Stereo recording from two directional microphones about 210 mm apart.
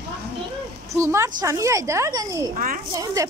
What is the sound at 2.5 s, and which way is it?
Speech, 40° right (ahead or behind).